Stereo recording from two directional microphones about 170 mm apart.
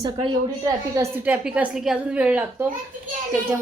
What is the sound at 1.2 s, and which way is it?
A woman's voice, 10° right (ahead or behind).